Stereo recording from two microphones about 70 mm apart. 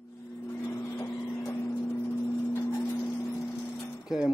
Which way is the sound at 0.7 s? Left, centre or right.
Left.